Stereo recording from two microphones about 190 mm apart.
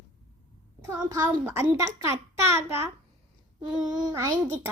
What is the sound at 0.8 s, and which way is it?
A child's voice, 20° right (ahead or behind).